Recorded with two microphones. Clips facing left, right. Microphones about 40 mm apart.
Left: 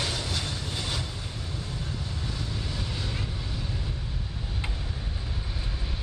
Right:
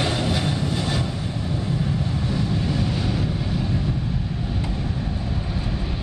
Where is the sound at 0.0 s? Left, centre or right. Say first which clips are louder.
Right 8 dB; right.